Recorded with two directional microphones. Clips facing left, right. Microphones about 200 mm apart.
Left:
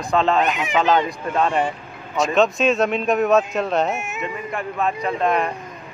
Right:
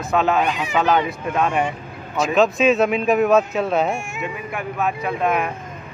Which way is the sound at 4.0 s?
20° left (ahead or behind).